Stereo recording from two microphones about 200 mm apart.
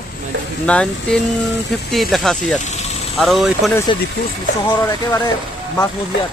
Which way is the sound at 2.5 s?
35° left (ahead or behind).